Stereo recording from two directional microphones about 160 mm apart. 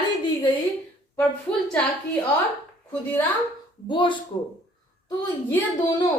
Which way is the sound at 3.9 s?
30° left (ahead or behind).